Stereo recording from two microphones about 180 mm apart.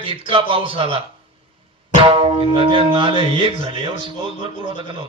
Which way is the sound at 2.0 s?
30° right (ahead or behind).